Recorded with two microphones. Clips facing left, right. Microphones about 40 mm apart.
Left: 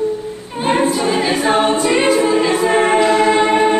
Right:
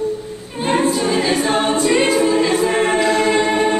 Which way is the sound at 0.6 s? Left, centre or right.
Centre.